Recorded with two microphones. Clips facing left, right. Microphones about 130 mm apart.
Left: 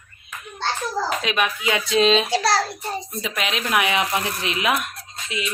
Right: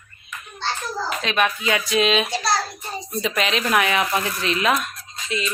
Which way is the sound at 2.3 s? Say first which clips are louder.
Left 3 dB; 85° left.